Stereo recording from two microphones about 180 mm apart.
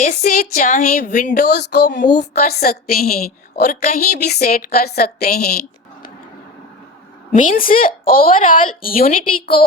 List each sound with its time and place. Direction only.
0.0 s speech: 50° left (ahead or behind)
1.5 s speech: 70° left (ahead or behind)
2.1 s a woman's voice: 55° left (ahead or behind)
7.3 s speech: 50° left (ahead or behind)